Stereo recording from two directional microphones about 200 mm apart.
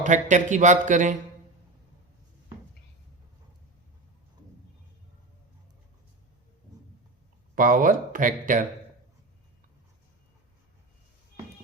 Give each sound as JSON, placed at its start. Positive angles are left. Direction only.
{"t": 0.0, "sound": "speech", "side_deg": -40}
{"t": 7.5, "sound": "speech", "side_deg": -40}